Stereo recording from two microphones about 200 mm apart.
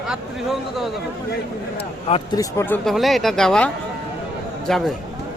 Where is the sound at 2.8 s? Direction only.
Centre (ahead or behind).